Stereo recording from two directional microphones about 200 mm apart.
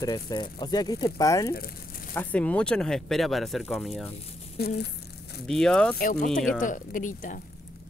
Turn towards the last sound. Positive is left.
turn(degrees=40)  # may be behind; listen again after turning